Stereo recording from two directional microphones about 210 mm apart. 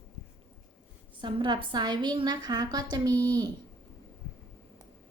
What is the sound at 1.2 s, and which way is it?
A woman's voice, 20° right (ahead or behind).